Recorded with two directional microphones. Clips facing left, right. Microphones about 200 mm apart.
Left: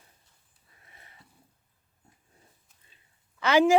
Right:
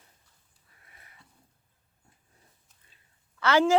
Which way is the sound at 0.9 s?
25° left (ahead or behind).